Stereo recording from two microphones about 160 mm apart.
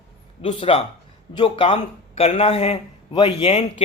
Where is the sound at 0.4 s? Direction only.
35° left (ahead or behind).